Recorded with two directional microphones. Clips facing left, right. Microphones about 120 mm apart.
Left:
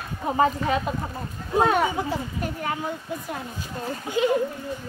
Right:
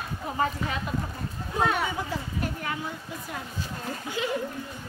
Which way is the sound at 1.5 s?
30° left (ahead or behind).